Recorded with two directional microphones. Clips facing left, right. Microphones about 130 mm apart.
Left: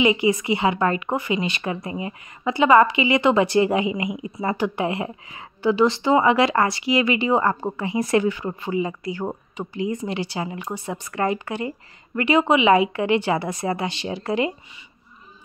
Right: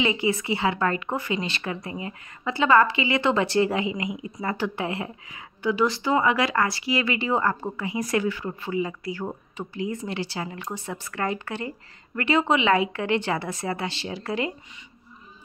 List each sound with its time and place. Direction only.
0.0 s a woman's voice: 15° left (ahead or behind)